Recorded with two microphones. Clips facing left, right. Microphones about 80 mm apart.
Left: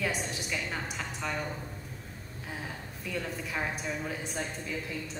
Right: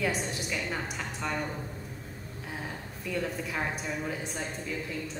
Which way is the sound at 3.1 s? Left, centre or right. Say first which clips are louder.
Right 3 dB; centre.